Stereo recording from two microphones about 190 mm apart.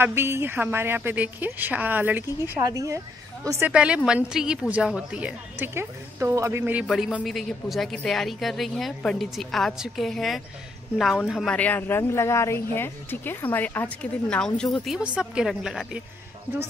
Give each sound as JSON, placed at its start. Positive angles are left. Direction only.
{"t": 0.0, "sound": "a woman's voice", "side_deg": -10}